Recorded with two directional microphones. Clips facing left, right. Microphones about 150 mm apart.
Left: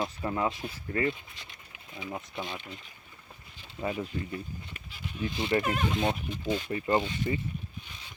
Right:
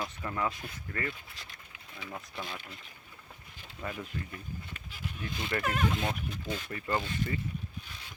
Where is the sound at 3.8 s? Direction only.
20° left (ahead or behind).